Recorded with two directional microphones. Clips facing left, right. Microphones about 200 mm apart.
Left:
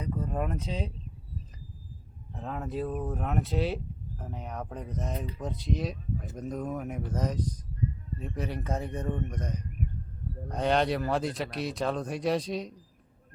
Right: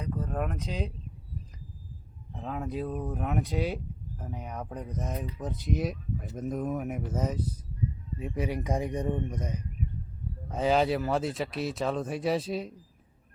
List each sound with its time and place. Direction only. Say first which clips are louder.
0.0 s a sound: even; 10° left (ahead or behind)
0.7 s speech: even; centre (ahead or behind)
2.3 s speech: right 1 dB; centre (ahead or behind)